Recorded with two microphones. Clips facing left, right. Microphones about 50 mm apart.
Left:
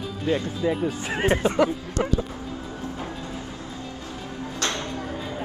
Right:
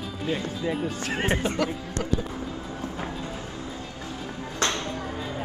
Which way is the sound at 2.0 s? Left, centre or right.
Left.